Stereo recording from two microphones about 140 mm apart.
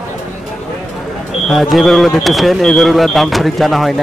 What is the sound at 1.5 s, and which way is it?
Speech, centre (ahead or behind).